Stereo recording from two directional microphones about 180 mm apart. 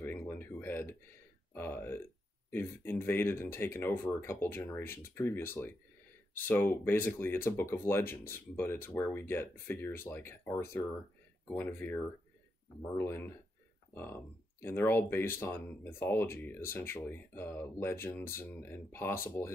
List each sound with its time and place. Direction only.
0.0 s a sound: 10° left (ahead or behind)
1.5 s speech: 10° left (ahead or behind)
14.6 s speech: 10° left (ahead or behind)